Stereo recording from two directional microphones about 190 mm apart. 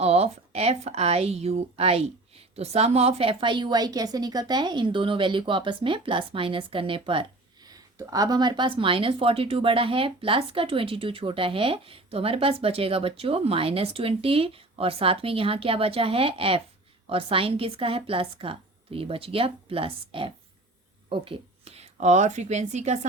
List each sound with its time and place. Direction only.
0.0 s speech: 35° right (ahead or behind)